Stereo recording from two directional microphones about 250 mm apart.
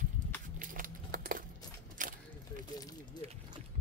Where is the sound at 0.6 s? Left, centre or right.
Right.